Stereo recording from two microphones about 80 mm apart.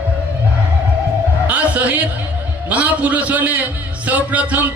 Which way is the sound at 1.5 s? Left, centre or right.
Centre.